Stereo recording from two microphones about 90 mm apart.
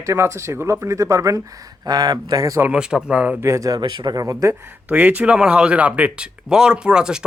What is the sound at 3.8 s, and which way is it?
Speech, 55° right (ahead or behind).